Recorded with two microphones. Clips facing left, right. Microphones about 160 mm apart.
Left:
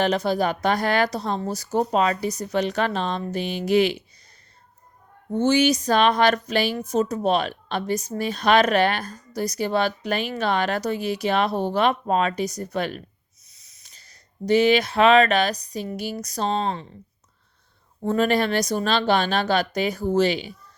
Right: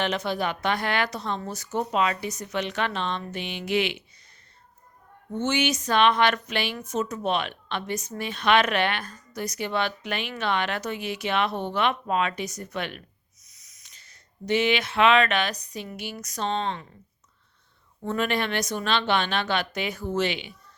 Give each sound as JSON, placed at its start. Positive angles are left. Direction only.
{"t": 0.0, "sound": "speech", "side_deg": 35}
{"t": 5.3, "sound": "speech", "side_deg": 35}
{"t": 18.0, "sound": "speech", "side_deg": 35}